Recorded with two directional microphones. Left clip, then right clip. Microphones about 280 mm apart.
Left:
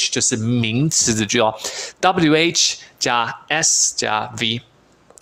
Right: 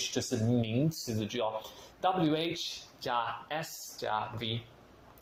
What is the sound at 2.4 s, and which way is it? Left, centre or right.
Speech, left.